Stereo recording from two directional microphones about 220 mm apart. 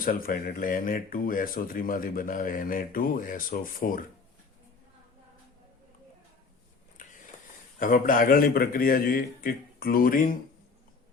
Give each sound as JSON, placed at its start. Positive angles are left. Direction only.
{"t": 0.0, "sound": "speech", "side_deg": 40}
{"t": 7.0, "sound": "a sound", "side_deg": 35}
{"t": 7.8, "sound": "speech", "side_deg": 35}